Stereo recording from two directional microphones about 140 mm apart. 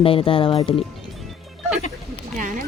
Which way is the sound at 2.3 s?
70° right (ahead or behind).